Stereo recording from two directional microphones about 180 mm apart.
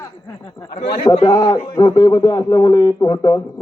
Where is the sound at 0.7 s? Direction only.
30° left (ahead or behind).